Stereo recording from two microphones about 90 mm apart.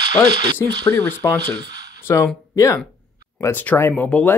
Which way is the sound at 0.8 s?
25° left (ahead or behind).